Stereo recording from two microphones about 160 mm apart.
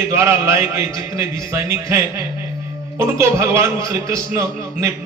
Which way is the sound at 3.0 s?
15° right (ahead or behind).